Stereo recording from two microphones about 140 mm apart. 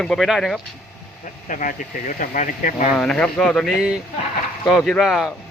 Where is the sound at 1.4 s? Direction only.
70° left (ahead or behind).